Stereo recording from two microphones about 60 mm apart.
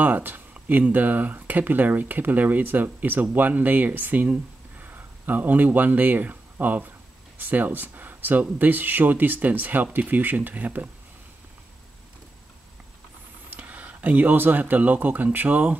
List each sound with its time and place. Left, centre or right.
0.0 s speech: right
13.5 s speech: right